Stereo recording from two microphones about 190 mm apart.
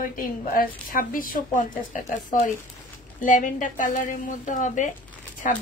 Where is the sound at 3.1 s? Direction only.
45° left (ahead or behind).